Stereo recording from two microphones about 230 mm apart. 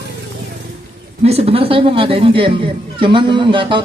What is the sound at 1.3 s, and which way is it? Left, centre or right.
A man's voice, right.